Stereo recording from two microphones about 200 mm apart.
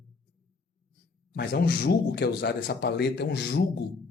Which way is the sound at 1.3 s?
55° left (ahead or behind).